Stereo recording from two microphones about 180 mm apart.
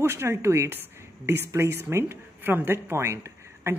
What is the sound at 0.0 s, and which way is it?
Speech, 15° right (ahead or behind).